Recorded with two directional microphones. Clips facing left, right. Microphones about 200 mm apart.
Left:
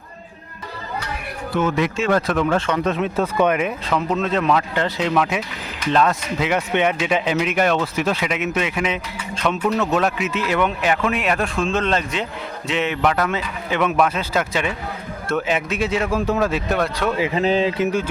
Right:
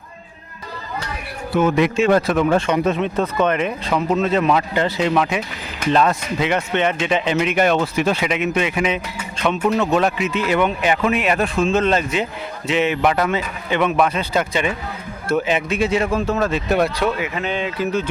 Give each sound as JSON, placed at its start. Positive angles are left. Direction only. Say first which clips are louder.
{"t": 1.5, "sound": "speech", "louder": "right 4 dB", "side_deg": -15}
{"t": 2.2, "sound": "speech", "louder": "right 3 dB", "side_deg": -5}
{"t": 2.8, "sound": "a man's voice", "louder": "right 1 dB", "side_deg": 0}
{"t": 6.7, "sound": "a man's voice", "louder": "even", "side_deg": 15}
{"t": 16.7, "sound": "speech", "louder": "right 3 dB", "side_deg": -10}
{"t": 17.2, "sound": "speech", "louder": "left 5 dB", "side_deg": 30}